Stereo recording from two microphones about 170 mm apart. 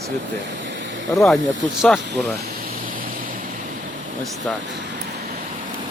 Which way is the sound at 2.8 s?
55° right (ahead or behind).